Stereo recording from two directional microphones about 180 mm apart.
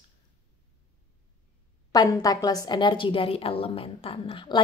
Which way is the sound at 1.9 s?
20° left (ahead or behind).